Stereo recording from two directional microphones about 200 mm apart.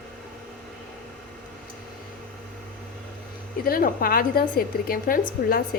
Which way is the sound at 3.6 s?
45° left (ahead or behind).